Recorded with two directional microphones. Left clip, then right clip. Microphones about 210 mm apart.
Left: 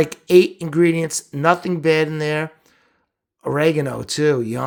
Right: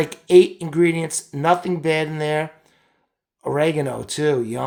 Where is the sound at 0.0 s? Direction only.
25° left (ahead or behind).